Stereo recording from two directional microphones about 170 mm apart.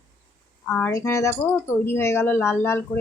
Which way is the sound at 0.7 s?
15° left (ahead or behind).